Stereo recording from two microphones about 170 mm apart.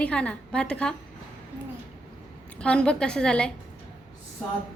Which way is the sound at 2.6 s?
5° left (ahead or behind).